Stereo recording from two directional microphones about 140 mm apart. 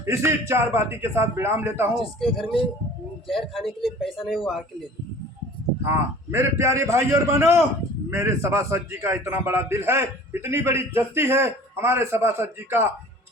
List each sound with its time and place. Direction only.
0.0 s a man's voice: 20° right (ahead or behind)
2.2 s speech: centre (ahead or behind)
5.8 s a man's voice: 20° right (ahead or behind)